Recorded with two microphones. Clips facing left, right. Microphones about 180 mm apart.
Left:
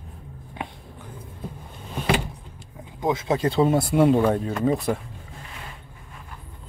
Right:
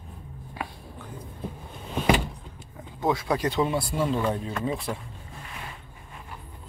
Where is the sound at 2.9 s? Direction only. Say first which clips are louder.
Left 2 dB; 20° left (ahead or behind).